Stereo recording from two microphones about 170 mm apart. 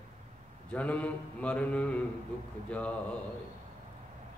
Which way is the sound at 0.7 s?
10° left (ahead or behind).